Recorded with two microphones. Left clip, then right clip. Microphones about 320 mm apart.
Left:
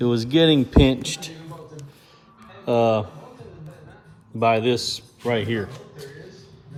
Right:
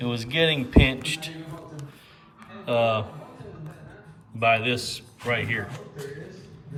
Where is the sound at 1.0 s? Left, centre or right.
Centre.